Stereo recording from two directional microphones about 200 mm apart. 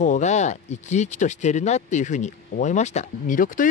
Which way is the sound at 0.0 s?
35° left (ahead or behind).